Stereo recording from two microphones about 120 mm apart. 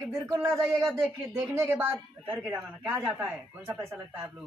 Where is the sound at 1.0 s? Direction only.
20° right (ahead or behind).